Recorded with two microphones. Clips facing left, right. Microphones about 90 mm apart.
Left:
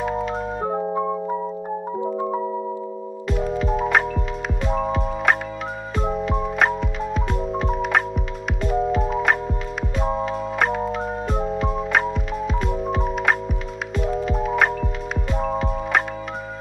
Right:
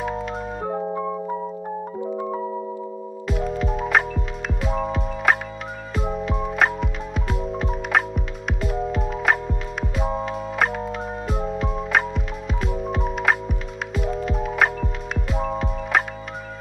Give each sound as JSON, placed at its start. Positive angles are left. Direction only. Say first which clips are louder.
{"t": 0.0, "sound": "music", "louder": "left 3 dB", "side_deg": 0}
{"t": 0.7, "sound": "music", "louder": "left 2 dB", "side_deg": 20}
{"t": 2.0, "sound": "music", "louder": "left 3 dB", "side_deg": 20}
{"t": 3.3, "sound": "music", "louder": "left 2 dB", "side_deg": 0}